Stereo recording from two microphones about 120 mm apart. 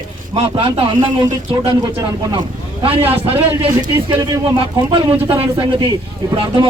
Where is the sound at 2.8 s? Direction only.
50° right (ahead or behind).